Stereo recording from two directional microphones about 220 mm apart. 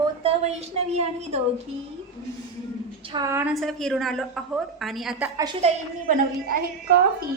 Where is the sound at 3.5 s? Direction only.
Centre (ahead or behind).